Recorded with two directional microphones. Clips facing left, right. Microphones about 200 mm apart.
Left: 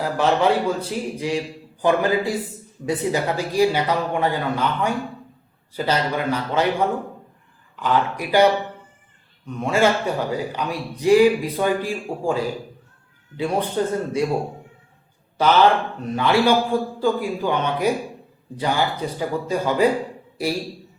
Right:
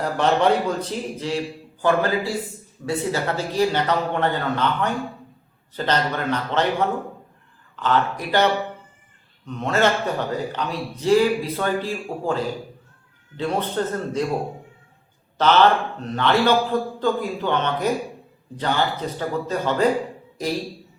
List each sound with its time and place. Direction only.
0.0 s a man's voice: 5° left (ahead or behind)
9.5 s a man's voice: 10° left (ahead or behind)
13.3 s a man's voice: 10° left (ahead or behind)
15.4 s a man's voice: 10° left (ahead or behind)